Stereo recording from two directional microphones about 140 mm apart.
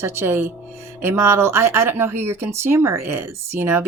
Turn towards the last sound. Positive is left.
turn(degrees=-15)  # may be behind; listen again after turning